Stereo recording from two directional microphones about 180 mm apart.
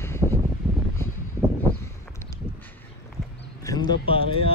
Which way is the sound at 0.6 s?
30° right (ahead or behind).